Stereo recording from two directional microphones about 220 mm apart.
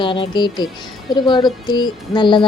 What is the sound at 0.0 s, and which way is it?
Speech, 20° left (ahead or behind).